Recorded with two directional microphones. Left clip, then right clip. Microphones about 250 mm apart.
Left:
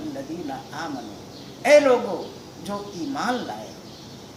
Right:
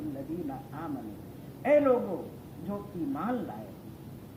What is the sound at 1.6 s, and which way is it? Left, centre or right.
Speech, centre.